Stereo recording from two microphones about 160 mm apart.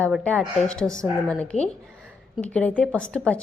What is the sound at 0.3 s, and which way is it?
A woman's voice, 5° left (ahead or behind).